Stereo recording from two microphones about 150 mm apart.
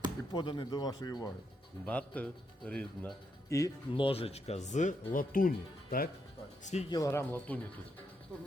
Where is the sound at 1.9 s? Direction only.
10° left (ahead or behind).